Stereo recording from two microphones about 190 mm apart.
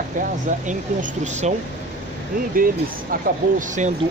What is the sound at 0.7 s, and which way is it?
Speech, 40° right (ahead or behind).